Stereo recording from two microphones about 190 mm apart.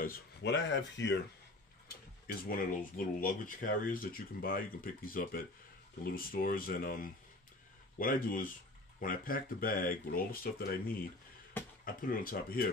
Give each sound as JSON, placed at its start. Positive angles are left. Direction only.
{"t": 0.4, "sound": "speech", "side_deg": 70}
{"t": 1.9, "sound": "a sound", "side_deg": 50}
{"t": 3.2, "sound": "speech", "side_deg": 45}